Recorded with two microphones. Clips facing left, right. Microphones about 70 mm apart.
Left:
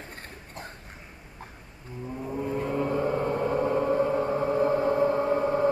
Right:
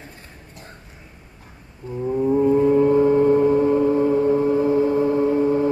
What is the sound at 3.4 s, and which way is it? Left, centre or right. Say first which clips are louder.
Gong: right 8 dB; left.